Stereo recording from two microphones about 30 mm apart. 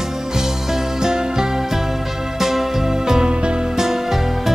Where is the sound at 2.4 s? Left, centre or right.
Centre.